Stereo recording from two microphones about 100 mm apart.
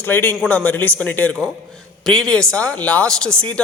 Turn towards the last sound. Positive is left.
turn(degrees=10)  # may be behind; listen again after turning